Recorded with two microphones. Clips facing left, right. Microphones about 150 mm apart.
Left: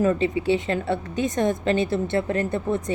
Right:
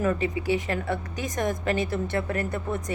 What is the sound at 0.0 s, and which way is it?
A woman's voice, 25° left (ahead or behind).